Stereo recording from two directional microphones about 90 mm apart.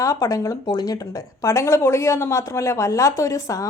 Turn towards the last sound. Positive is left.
turn(degrees=40)  # may be behind; listen again after turning